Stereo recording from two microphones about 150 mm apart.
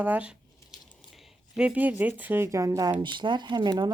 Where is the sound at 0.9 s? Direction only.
Centre (ahead or behind).